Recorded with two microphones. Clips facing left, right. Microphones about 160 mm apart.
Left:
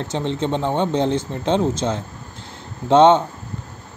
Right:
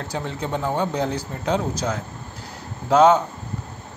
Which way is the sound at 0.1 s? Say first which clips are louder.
Left 5 dB; 25° left (ahead or behind).